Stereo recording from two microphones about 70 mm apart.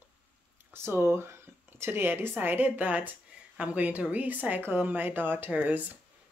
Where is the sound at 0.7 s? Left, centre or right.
Right.